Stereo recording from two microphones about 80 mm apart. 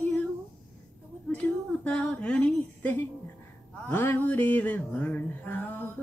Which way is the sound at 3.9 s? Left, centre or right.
Left.